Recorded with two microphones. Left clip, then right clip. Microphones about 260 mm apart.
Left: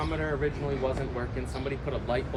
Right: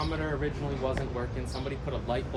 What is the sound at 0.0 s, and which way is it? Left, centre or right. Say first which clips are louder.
Speech: left 2 dB; right.